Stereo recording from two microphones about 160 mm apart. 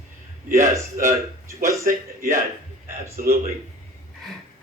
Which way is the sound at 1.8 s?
55° right (ahead or behind).